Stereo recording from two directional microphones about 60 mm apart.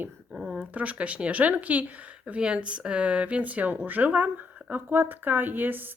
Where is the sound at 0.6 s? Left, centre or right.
Right.